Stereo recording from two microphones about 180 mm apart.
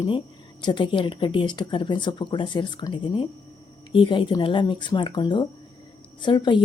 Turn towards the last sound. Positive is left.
turn(degrees=25)  # may be behind; listen again after turning